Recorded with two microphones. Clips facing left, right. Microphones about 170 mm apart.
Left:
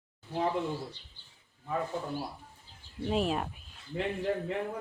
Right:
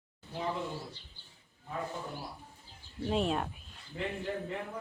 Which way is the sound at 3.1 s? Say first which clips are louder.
Left 1 dB; centre (ahead or behind).